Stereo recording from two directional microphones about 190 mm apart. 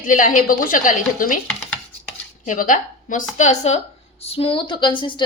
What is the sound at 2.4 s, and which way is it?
A woman's voice, 45° left (ahead or behind).